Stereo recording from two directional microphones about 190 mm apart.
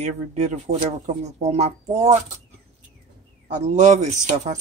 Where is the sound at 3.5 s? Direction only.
40° right (ahead or behind).